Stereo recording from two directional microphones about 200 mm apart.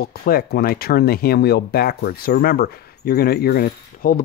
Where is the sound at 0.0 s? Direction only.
50° left (ahead or behind).